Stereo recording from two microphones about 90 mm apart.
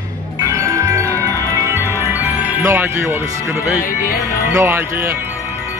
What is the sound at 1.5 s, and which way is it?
Music, 30° right (ahead or behind).